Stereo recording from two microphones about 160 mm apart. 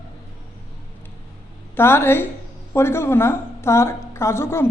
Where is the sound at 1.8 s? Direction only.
15° left (ahead or behind).